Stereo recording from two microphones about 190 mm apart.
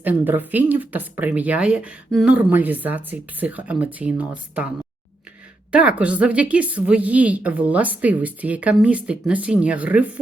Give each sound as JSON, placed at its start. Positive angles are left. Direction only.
{"t": 0.0, "sound": "speech", "side_deg": -10}
{"t": 5.7, "sound": "speech", "side_deg": -5}